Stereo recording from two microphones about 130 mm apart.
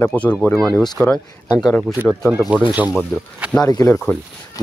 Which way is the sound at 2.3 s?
10° right (ahead or behind).